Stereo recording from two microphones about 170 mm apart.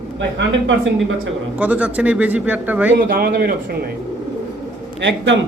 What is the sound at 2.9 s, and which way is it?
Speech, 60° right (ahead or behind).